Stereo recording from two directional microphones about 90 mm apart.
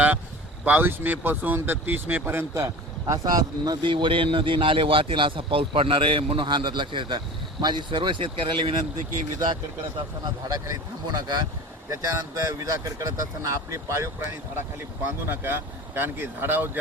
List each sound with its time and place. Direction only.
0.6 s speech: 20° right (ahead or behind)
3.1 s speech: 45° right (ahead or behind)
3.8 s speech: 65° right (ahead or behind)
10.2 s speech: 45° right (ahead or behind)
15.3 s speech: 25° right (ahead or behind)